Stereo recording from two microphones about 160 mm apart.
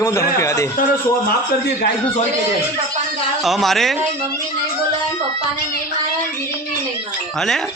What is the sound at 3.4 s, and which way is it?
Speech, centre (ahead or behind).